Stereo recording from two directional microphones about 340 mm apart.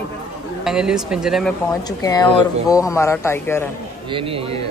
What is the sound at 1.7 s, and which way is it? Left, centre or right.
A man's voice, centre.